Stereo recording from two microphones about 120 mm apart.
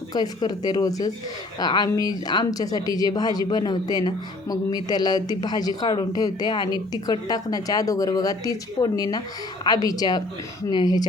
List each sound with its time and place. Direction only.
0.1 s speech: 35° left (ahead or behind)